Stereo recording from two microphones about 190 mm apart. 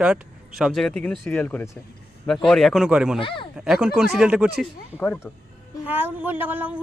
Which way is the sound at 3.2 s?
25° left (ahead or behind).